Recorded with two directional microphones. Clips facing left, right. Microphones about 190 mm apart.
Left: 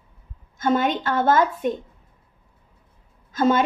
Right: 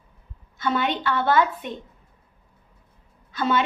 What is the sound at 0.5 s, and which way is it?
Speech, 45° left (ahead or behind).